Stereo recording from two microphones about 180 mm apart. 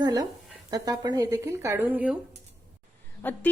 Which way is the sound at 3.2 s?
10° left (ahead or behind).